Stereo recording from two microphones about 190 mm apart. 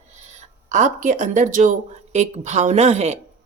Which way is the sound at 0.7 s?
40° right (ahead or behind).